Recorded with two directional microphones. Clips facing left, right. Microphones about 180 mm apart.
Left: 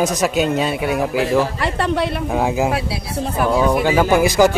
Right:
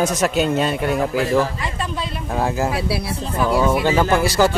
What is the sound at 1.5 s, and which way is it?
Speech, 70° left (ahead or behind).